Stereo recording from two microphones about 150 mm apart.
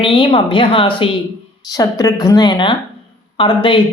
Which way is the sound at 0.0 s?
35° left (ahead or behind).